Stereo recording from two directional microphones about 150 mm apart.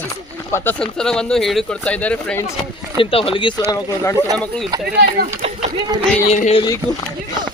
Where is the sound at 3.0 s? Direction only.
40° left (ahead or behind).